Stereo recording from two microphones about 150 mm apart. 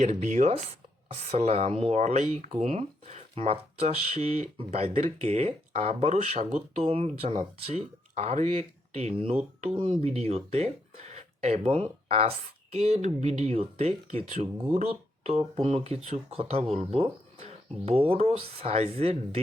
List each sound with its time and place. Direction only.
0.3 s speech: 45° right (ahead or behind)